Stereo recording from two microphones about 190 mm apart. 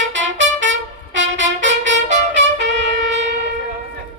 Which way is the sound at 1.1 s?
75° right (ahead or behind).